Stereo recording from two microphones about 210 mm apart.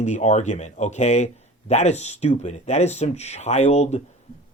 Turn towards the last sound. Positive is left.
turn(degrees=30)  # may be behind; listen again after turning